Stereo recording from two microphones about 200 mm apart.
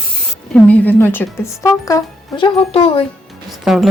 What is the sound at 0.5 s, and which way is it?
A woman's voice, 10° left (ahead or behind).